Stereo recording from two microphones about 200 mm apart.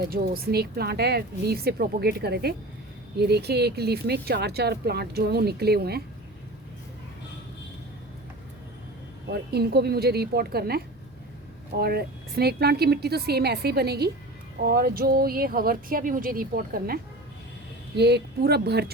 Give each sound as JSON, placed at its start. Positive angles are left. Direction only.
{"t": 0.1, "sound": "speech", "side_deg": -50}
{"t": 9.3, "sound": "speech", "side_deg": -50}